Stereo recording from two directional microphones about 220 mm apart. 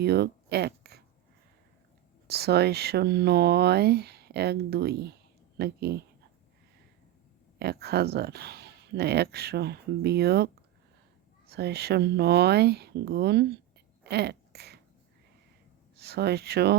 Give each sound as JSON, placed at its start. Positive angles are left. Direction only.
{"t": 0.0, "sound": "speech", "side_deg": -45}
{"t": 2.2, "sound": "speech", "side_deg": -45}
{"t": 7.6, "sound": "speech", "side_deg": -45}
{"t": 14.0, "sound": "a sound", "side_deg": -50}
{"t": 16.0, "sound": "speech", "side_deg": -45}